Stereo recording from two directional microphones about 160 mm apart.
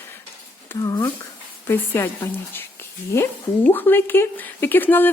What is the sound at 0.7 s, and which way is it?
Speech, 15° left (ahead or behind).